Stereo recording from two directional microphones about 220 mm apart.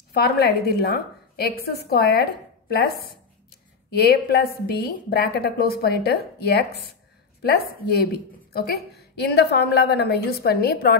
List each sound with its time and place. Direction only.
0.1 s a woman's voice: 45° left (ahead or behind)